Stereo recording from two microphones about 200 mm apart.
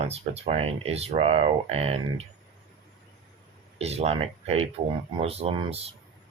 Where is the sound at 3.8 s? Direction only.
30° right (ahead or behind).